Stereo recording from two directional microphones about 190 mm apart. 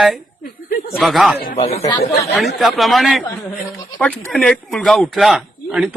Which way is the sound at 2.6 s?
Centre (ahead or behind).